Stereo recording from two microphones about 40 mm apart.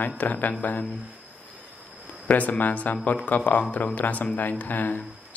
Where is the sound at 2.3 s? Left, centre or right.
Left.